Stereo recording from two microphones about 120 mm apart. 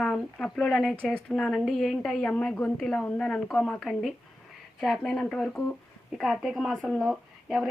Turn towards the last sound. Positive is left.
turn(degrees=-5)  # may be behind; listen again after turning